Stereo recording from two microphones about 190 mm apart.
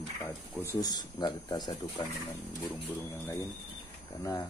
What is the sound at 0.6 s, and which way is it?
Speech, 20° left (ahead or behind).